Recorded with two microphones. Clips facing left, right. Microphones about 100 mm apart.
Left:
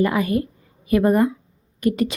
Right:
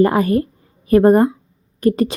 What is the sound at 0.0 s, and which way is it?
A woman's voice, 40° right (ahead or behind).